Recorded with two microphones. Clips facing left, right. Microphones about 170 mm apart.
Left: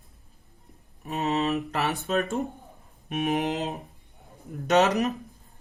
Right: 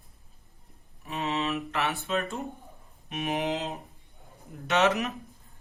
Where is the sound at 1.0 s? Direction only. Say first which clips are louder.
Left 4 dB; 40° left (ahead or behind).